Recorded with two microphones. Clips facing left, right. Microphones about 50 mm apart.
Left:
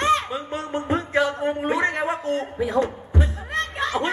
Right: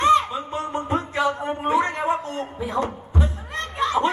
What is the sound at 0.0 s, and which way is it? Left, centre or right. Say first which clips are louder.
Music: right 3 dB; left.